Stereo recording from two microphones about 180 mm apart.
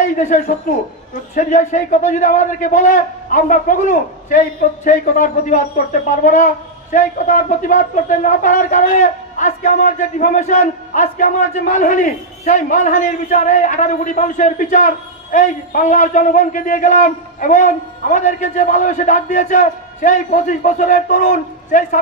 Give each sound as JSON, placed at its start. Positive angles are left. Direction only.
{"t": 0.0, "sound": "a man's voice", "side_deg": 45}